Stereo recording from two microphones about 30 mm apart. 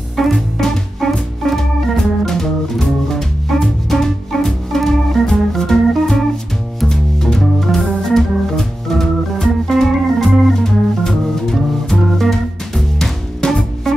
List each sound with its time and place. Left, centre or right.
0.1 s music: centre
1.0 s organ: centre
3.5 s music: centre
3.9 s organ: centre
6.9 s music: centre
7.3 s organ: centre
10.6 s music: centre